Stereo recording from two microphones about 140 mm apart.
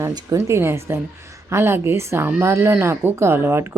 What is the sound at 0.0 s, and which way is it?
Speech, 25° right (ahead or behind).